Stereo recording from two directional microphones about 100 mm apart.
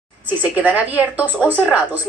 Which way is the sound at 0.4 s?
15° right (ahead or behind).